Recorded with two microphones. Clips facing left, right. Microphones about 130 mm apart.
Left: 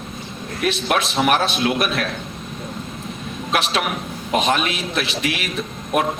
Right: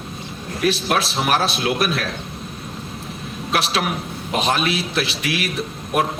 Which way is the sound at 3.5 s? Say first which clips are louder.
Even; 35° right (ahead or behind).